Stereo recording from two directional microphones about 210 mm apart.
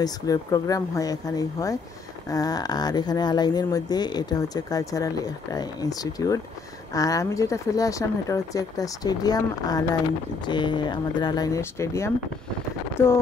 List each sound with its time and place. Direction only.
0.0 s speech: 15° left (ahead or behind)